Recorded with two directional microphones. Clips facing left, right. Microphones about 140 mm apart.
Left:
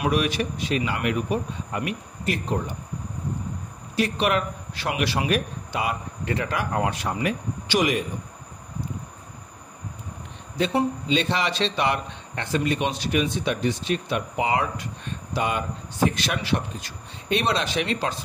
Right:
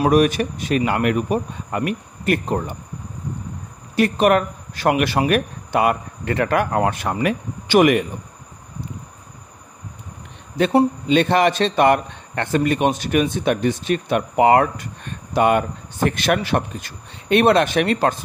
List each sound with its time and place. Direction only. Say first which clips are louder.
0.0 s a man's voice: right 8 dB; 45° right (ahead or behind)
3.9 s speech: right 7 dB; 50° right (ahead or behind)
11.1 s a man's voice: right 8 dB; 55° right (ahead or behind)